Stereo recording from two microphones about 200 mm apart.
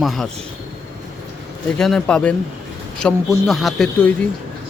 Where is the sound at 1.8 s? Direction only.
5° left (ahead or behind).